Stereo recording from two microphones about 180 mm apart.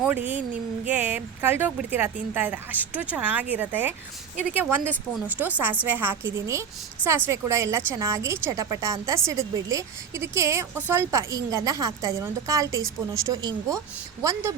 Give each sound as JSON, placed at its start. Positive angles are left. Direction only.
{"t": 0.0, "sound": "speech", "side_deg": -10}